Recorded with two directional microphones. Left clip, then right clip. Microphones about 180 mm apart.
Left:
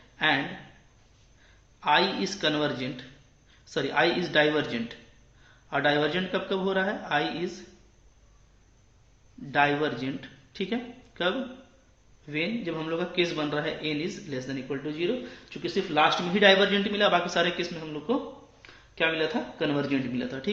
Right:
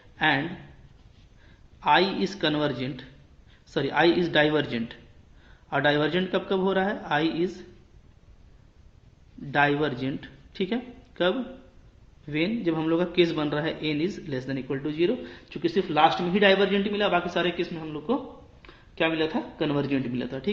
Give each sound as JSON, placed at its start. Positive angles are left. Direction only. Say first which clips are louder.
{"t": 0.2, "sound": "a sound", "louder": "right 1 dB", "side_deg": -40}
{"t": 1.8, "sound": "speech", "louder": "right 2 dB", "side_deg": -40}
{"t": 9.5, "sound": "a man's voice", "louder": "right 1 dB", "side_deg": -40}
{"t": 16.0, "sound": "a man's voice", "louder": "even", "side_deg": -20}
{"t": 18.1, "sound": "speech", "louder": "even", "side_deg": -30}